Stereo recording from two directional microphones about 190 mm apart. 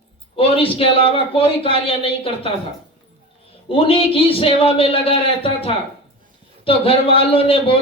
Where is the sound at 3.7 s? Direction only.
30° left (ahead or behind).